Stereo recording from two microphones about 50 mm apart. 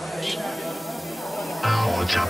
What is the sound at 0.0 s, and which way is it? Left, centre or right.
Music, centre.